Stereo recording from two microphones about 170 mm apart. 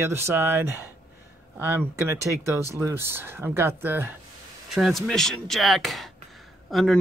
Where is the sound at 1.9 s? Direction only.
15° right (ahead or behind).